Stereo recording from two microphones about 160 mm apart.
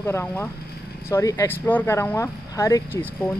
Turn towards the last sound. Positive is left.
turn(degrees=10)  # may be behind; listen again after turning